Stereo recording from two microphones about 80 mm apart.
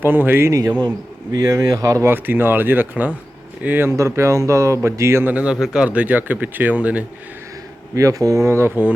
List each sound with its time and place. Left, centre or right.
0.0 s speech: right
1.3 s speech: right
2.0 s speech: right
3.9 s speech: right
5.3 s speech: centre
7.9 s speech: right
8.4 s speech: right